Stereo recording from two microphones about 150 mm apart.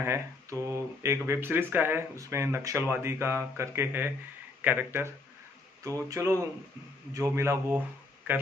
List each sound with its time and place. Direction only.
0.0 s a man's voice: 20° right (ahead or behind)